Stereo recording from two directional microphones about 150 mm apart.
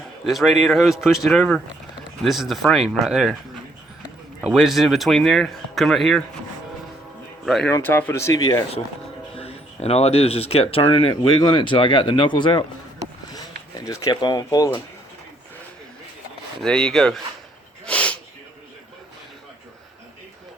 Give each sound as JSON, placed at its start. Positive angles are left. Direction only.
{"t": 0.3, "sound": "speech", "side_deg": 0}
{"t": 4.4, "sound": "speech", "side_deg": -5}
{"t": 7.4, "sound": "speech", "side_deg": 0}
{"t": 7.7, "sound": "speech", "side_deg": 15}
{"t": 9.3, "sound": "speech", "side_deg": 40}
{"t": 13.3, "sound": "speech", "side_deg": 20}
{"t": 16.6, "sound": "speech", "side_deg": 5}
{"t": 17.8, "sound": "snort", "side_deg": 10}